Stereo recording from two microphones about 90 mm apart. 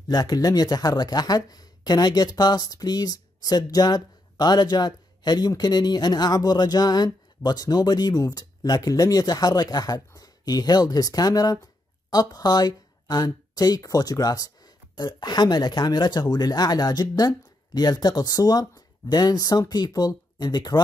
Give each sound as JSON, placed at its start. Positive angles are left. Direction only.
{"t": 0.1, "sound": "speech", "side_deg": 45}